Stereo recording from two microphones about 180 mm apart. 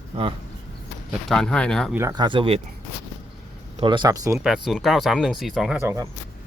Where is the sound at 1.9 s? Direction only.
15° right (ahead or behind).